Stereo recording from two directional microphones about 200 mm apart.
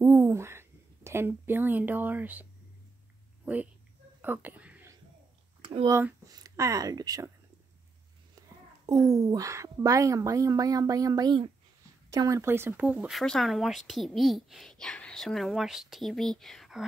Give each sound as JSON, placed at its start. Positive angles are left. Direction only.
{"t": 0.0, "sound": "speech", "side_deg": -10}
{"t": 4.2, "sound": "whispering", "side_deg": -10}
{"t": 5.6, "sound": "a sound", "side_deg": -25}
{"t": 5.9, "sound": "a woman's voice", "side_deg": -15}
{"t": 8.8, "sound": "a woman's voice", "side_deg": -20}